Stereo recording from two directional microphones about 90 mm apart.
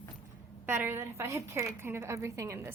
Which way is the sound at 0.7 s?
25° right (ahead or behind).